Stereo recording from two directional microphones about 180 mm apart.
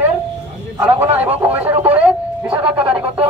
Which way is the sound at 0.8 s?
10° right (ahead or behind).